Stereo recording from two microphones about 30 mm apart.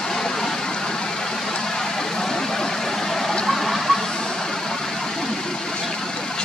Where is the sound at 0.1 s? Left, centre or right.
Centre.